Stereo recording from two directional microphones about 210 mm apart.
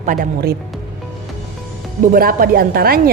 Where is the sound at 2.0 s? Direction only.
45° right (ahead or behind).